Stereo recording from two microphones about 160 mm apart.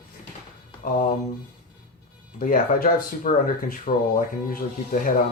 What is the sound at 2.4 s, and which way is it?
Speech, 60° left (ahead or behind).